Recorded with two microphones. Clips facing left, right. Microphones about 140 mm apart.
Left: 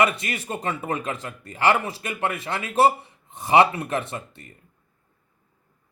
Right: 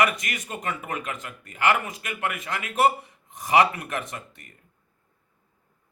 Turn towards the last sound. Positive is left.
turn(degrees=30)  # may be behind; listen again after turning